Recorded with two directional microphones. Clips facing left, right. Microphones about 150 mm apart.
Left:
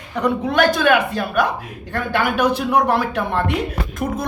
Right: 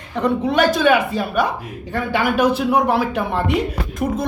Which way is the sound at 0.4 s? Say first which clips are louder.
Right 1 dB; centre (ahead or behind).